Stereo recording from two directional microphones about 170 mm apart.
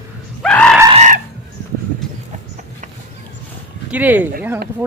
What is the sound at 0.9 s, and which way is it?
Chicken, 45° right (ahead or behind).